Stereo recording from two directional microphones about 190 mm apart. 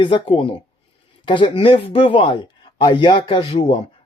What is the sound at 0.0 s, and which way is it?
Speech, 25° left (ahead or behind).